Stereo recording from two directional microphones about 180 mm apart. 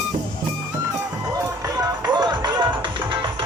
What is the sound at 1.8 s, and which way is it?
Music, 20° right (ahead or behind).